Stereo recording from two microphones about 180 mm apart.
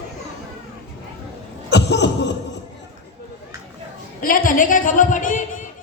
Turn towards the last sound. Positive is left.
turn(degrees=45)  # may be behind; listen again after turning